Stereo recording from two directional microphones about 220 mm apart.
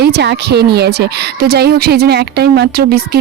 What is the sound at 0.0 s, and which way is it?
A woman's voice, 50° right (ahead or behind).